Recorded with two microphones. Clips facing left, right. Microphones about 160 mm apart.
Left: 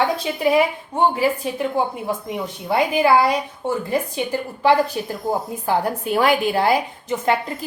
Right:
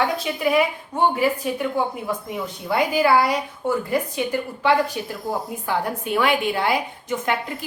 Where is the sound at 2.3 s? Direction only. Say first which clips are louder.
Left 2 dB; 20° left (ahead or behind).